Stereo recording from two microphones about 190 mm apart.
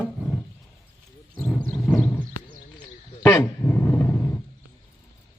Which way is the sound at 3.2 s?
10° left (ahead or behind).